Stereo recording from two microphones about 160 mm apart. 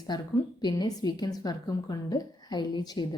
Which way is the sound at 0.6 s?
25° left (ahead or behind).